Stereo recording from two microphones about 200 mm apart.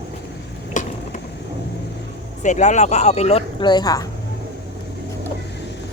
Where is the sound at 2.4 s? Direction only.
35° left (ahead or behind); by 4.0 s 20° left (ahead or behind).